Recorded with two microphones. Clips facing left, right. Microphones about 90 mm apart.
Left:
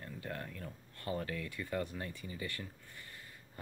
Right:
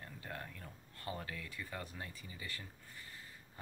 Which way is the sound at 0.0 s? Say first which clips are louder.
Left 4 dB; 20° right (ahead or behind).